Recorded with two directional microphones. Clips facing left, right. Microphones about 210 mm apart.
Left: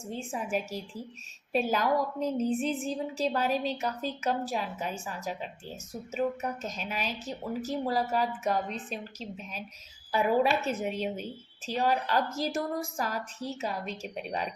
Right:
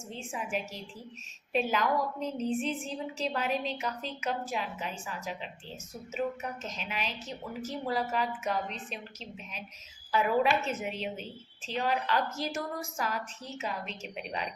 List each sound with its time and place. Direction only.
1.5 s a woman's voice: 40° left (ahead or behind)